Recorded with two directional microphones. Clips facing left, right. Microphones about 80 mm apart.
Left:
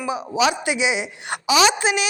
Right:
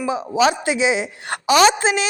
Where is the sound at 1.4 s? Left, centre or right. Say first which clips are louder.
Right 3 dB; right.